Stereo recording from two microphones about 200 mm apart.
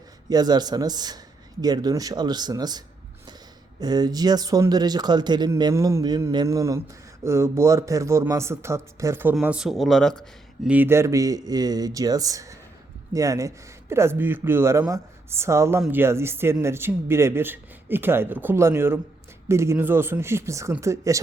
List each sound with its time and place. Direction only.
0.3 s speech: 20° right (ahead or behind)